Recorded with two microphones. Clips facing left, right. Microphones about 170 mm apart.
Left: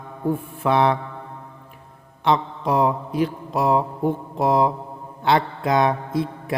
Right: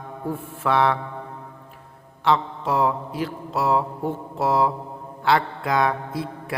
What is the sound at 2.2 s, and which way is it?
Mantra, 20° left (ahead or behind).